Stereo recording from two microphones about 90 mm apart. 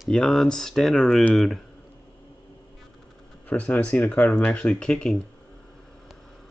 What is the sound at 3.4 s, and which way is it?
Speech, 15° left (ahead or behind).